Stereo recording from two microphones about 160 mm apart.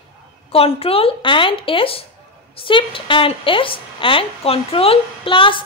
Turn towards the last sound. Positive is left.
turn(degrees=35)  # may be behind; listen again after turning